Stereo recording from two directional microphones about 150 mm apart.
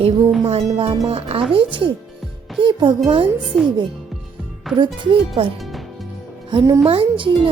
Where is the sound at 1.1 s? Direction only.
40° right (ahead or behind).